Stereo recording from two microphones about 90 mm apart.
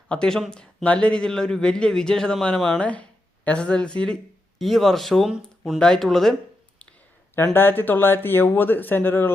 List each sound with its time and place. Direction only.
0.1 s a man's voice: 10° left (ahead or behind)
7.3 s speech: 25° left (ahead or behind)